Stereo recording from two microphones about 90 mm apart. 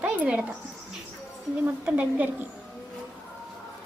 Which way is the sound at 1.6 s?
15° right (ahead or behind).